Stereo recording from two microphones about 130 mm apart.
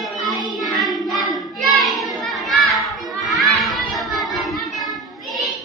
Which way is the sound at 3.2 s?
Centre (ahead or behind).